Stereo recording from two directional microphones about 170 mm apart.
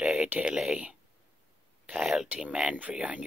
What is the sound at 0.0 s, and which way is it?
Speech, 5° right (ahead or behind).